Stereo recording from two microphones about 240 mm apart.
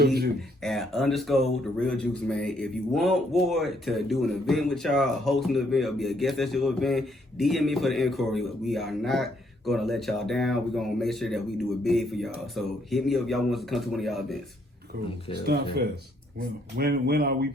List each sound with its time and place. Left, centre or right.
0.0 s speech: right
0.6 s speech: centre
14.9 s speech: right